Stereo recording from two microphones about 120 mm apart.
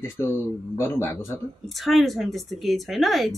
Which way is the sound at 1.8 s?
Centre (ahead or behind).